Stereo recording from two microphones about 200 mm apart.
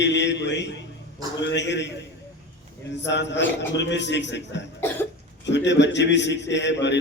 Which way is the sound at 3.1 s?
60° left (ahead or behind).